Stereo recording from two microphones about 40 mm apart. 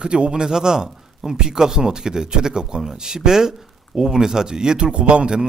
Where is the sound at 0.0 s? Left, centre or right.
Right.